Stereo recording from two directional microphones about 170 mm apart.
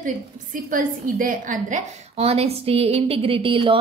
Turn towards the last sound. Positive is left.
turn(degrees=-30)  # may be behind; listen again after turning